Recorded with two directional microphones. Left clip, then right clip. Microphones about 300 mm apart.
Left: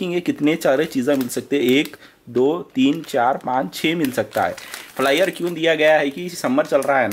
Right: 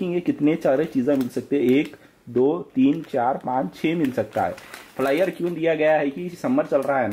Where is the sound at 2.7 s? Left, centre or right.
Centre.